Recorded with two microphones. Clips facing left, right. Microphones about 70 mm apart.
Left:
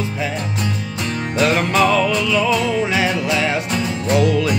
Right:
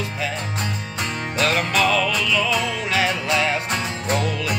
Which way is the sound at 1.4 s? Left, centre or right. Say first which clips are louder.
Left 4 dB; centre.